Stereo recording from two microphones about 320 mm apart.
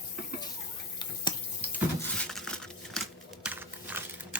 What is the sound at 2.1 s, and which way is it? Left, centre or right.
Crumpling, centre.